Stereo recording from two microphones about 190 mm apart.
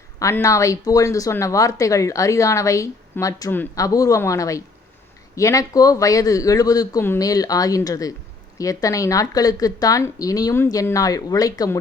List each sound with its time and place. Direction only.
0.2 s speech: 15° left (ahead or behind)